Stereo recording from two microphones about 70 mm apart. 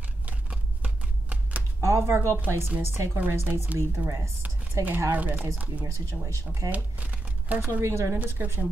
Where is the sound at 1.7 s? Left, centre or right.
Right.